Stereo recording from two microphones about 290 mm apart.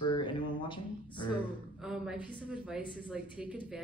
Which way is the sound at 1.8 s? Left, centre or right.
Centre.